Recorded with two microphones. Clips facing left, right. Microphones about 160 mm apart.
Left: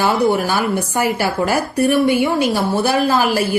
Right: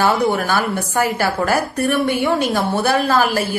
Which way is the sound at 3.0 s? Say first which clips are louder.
Left 1 dB; 15° left (ahead or behind).